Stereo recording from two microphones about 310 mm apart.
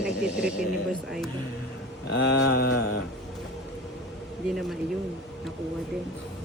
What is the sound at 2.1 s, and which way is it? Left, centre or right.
Mantra, left.